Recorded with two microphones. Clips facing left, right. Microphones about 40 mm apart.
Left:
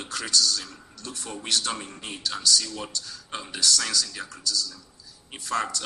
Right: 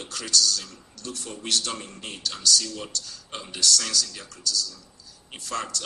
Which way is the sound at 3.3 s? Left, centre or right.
Left.